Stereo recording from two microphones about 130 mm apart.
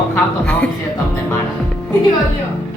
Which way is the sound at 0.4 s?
10° left (ahead or behind).